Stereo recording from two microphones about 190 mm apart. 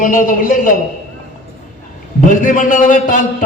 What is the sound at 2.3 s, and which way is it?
Speech, 40° left (ahead or behind).